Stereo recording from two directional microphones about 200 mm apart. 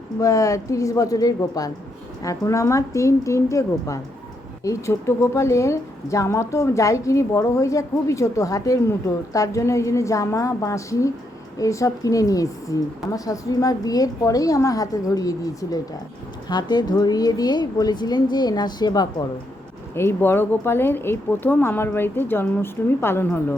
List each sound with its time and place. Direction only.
0.2 s a woman's voice: 15° left (ahead or behind)